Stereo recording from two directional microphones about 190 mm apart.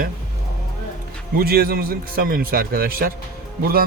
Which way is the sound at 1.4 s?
55° right (ahead or behind).